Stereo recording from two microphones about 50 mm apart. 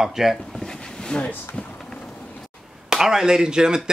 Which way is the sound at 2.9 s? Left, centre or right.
Centre.